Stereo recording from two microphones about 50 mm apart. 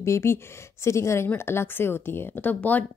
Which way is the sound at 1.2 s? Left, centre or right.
Left.